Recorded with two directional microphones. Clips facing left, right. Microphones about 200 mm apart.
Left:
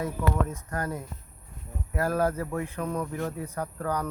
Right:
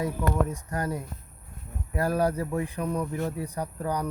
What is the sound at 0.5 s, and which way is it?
Speech, 15° right (ahead or behind).